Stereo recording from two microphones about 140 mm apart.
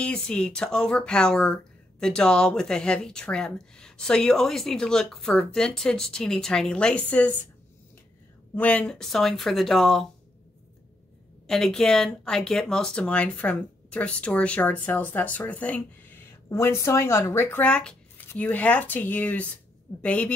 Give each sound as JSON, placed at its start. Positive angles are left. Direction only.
{"t": 0.0, "sound": "speech", "side_deg": 5}
{"t": 8.5, "sound": "speech", "side_deg": 10}
{"t": 11.4, "sound": "speech", "side_deg": 5}